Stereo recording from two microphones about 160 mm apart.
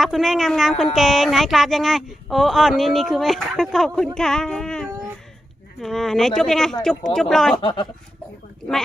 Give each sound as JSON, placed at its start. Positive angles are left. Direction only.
{"t": 0.0, "sound": "speech", "side_deg": 0}
{"t": 7.5, "sound": "speech", "side_deg": 30}